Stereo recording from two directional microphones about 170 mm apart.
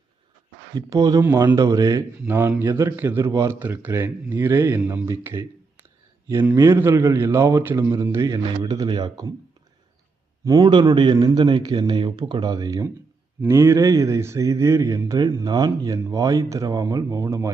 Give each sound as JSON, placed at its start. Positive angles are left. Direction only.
{"t": 0.8, "sound": "a man's voice", "side_deg": -20}
{"t": 10.4, "sound": "a man's voice", "side_deg": -20}